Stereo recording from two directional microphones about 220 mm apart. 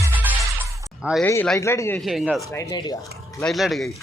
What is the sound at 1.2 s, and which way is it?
Speech, 10° left (ahead or behind).